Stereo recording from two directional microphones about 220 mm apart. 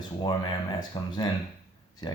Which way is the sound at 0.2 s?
20° left (ahead or behind).